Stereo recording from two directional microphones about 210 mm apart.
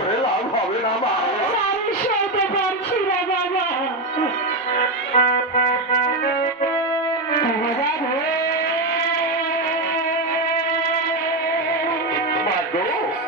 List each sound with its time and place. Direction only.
5.1 s music: 40° left (ahead or behind)